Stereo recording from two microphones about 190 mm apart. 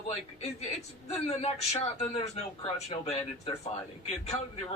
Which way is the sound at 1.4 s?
35° left (ahead or behind).